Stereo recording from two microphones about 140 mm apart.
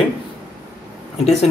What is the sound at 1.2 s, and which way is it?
Speech, 50° left (ahead or behind).